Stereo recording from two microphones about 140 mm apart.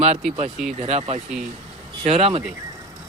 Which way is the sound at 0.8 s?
50° right (ahead or behind).